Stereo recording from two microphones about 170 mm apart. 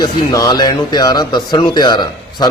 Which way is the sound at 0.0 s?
20° left (ahead or behind).